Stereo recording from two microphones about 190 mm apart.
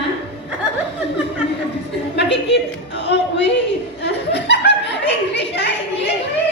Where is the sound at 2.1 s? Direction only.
65° left (ahead or behind).